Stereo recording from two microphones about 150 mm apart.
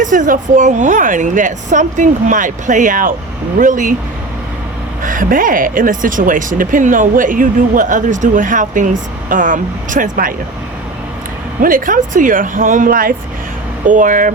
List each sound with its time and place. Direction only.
0.0 s speech: 60° right (ahead or behind)
5.0 s speech: 65° right (ahead or behind)
11.6 s speech: 65° right (ahead or behind)
13.8 s speech: 60° right (ahead or behind)